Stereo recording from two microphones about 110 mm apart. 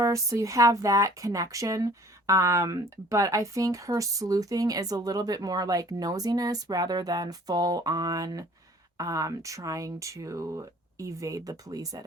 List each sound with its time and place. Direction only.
0.0 s speech: 30° right (ahead or behind)